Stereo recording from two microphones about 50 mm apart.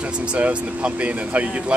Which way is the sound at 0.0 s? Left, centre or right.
Right.